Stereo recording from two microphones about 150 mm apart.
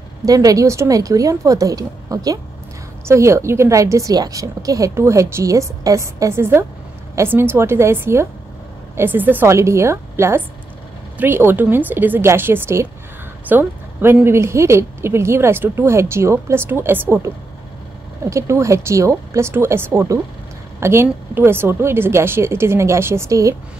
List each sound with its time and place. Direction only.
0.2 s a woman's voice: 25° right (ahead or behind)